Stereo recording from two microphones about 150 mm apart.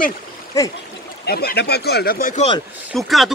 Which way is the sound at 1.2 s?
90° left.